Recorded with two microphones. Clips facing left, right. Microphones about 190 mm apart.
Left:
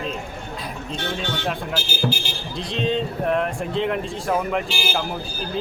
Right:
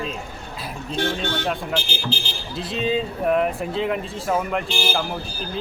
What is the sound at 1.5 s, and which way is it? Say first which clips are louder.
Speech: right 1 dB; 10° left (ahead or behind).